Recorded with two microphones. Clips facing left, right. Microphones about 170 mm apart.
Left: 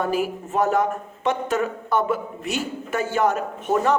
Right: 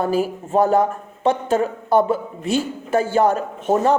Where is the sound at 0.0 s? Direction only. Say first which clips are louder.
Right 3 dB; 30° right (ahead or behind).